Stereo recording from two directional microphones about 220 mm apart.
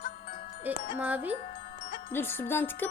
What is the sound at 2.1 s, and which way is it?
Music, 10° left (ahead or behind).